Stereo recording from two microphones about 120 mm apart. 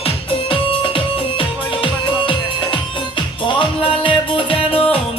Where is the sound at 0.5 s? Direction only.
50° left (ahead or behind).